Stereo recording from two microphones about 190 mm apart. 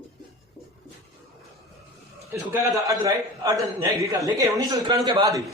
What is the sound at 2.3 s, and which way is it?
A man's voice, 10° right (ahead or behind).